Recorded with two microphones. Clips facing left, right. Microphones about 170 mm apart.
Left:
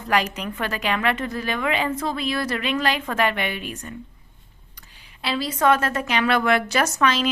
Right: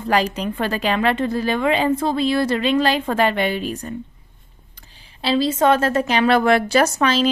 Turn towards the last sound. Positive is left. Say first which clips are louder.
# right 4 dB
turn(degrees=-30)  # may be behind; listen again after turning